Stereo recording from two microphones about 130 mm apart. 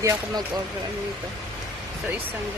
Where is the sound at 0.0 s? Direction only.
25° right (ahead or behind).